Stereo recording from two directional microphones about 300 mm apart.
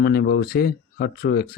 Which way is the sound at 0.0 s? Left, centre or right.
Left.